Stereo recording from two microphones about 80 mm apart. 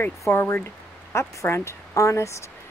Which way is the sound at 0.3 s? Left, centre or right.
Left.